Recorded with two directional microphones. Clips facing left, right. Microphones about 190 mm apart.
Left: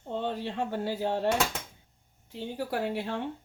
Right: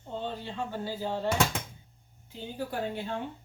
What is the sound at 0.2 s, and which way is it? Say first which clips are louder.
Speech: left 4 dB; 70° left (ahead or behind).